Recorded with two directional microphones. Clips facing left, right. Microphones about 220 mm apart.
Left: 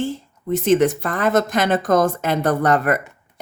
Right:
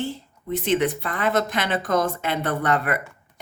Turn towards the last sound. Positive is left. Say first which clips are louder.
# left 5 dB
turn(degrees=45)  # may be behind; listen again after turning